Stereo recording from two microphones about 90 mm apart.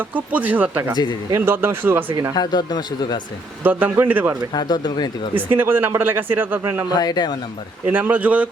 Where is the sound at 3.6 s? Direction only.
20° right (ahead or behind).